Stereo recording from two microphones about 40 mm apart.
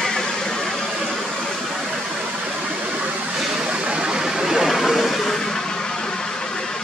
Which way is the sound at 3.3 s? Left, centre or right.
Centre.